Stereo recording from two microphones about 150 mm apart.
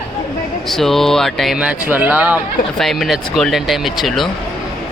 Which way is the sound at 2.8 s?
Centre (ahead or behind).